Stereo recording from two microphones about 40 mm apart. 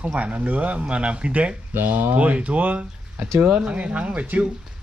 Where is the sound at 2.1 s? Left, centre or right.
Right.